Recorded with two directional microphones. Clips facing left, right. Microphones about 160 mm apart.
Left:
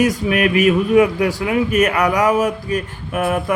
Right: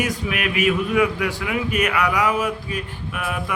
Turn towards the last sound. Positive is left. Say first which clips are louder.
# left 8 dB
turn(degrees=45)  # may be behind; listen again after turning